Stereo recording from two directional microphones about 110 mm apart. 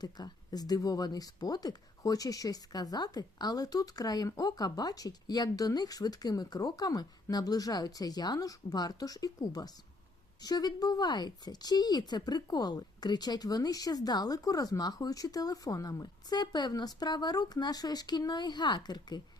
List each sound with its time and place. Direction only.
0.0 s speech: 35° left (ahead or behind)